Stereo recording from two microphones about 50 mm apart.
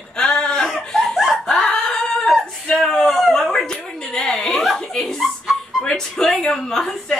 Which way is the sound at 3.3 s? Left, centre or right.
Centre.